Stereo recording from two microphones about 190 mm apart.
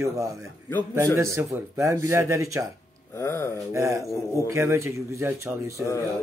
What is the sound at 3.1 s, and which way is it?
Speech, 15° left (ahead or behind).